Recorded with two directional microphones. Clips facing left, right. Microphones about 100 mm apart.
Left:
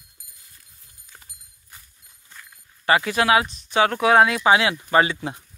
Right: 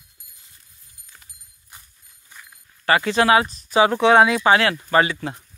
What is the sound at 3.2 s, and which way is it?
Speech, 5° left (ahead or behind).